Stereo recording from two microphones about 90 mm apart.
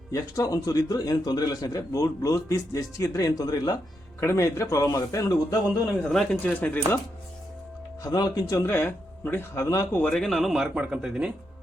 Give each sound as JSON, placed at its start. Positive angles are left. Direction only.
{"t": 0.1, "sound": "a man's voice", "side_deg": 40}
{"t": 4.2, "sound": "a man's voice", "side_deg": 30}
{"t": 6.0, "sound": "speech", "side_deg": 5}
{"t": 6.3, "sound": "speech", "side_deg": 20}
{"t": 8.0, "sound": "speech", "side_deg": 45}
{"t": 8.5, "sound": "speech", "side_deg": 25}
{"t": 9.9, "sound": "speech", "side_deg": 20}
{"t": 10.2, "sound": "speech", "side_deg": 0}